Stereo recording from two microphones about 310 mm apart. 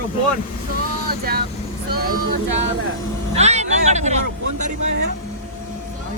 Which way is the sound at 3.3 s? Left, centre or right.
Right.